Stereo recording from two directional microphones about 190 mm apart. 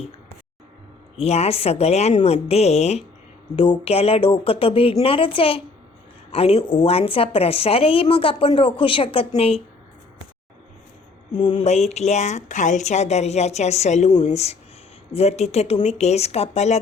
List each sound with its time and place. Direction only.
1.1 s a woman's voice: 35° left (ahead or behind)
11.3 s speech: 25° left (ahead or behind)